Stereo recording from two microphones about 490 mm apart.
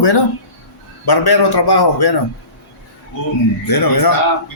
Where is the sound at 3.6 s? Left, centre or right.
Left.